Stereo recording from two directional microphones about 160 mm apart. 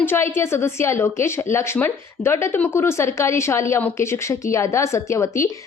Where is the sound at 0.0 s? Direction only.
15° left (ahead or behind).